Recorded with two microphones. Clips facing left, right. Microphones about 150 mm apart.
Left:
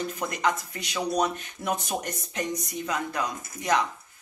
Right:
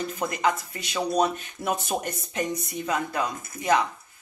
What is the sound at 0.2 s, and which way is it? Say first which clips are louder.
Speech: right 3 dB; 5° right (ahead or behind).